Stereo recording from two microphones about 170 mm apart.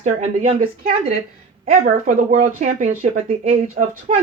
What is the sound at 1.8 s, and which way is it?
Speech, 55° right (ahead or behind).